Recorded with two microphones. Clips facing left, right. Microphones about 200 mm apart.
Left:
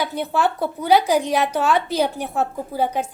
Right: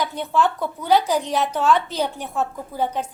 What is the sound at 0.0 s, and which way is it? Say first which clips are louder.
A woman's voice: even; 10° left (ahead or behind).